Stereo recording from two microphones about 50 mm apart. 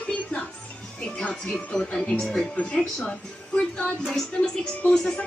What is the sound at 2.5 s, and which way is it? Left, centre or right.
Speech, left.